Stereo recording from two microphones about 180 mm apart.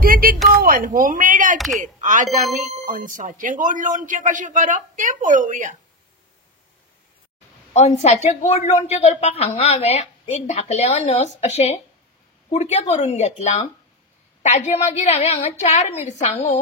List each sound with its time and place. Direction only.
0.0 s a sound: 55° right (ahead or behind)
0.6 s speech: 50° right (ahead or behind)
1.6 s speech: centre (ahead or behind)
2.0 s speech: 45° right (ahead or behind)
7.7 s speech: 35° left (ahead or behind)